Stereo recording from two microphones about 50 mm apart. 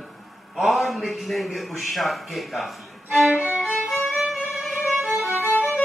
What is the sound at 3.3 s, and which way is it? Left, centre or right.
Violin, right.